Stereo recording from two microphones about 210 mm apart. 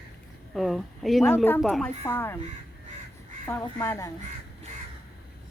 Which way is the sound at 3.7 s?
15° left (ahead or behind).